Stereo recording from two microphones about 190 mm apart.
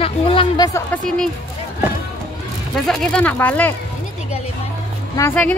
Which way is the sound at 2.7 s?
Centre (ahead or behind).